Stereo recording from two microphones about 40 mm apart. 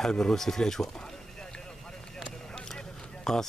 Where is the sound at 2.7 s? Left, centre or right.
Centre.